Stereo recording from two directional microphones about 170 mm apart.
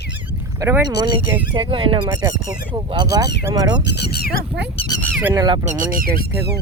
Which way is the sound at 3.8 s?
80° left.